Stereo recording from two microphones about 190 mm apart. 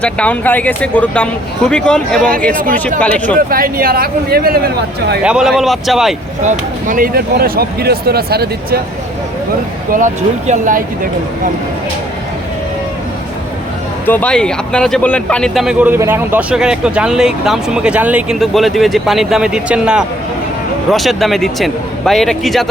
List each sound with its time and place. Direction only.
0.0 s speech: 5° left (ahead or behind)
3.5 s speech: 50° right (ahead or behind)
5.2 s speech: 5° right (ahead or behind)
6.4 s speech: 40° right (ahead or behind)
9.9 s speech: 40° right (ahead or behind)
14.1 s speech: 5° left (ahead or behind)